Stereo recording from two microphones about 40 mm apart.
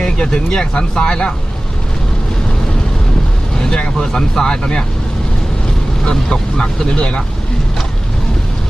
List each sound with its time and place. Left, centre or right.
0.0 s speech: centre
3.6 s speech: centre
6.1 s speech: centre